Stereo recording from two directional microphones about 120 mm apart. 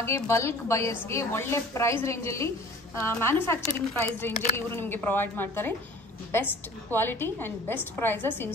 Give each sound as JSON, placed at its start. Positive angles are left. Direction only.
{"t": 0.0, "sound": "speech", "side_deg": 20}
{"t": 6.9, "sound": "a woman's voice", "side_deg": 15}